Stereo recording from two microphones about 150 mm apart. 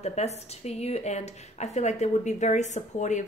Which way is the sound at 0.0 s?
45° left (ahead or behind).